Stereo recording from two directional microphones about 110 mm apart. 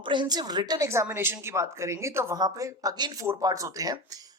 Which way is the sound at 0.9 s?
25° right (ahead or behind).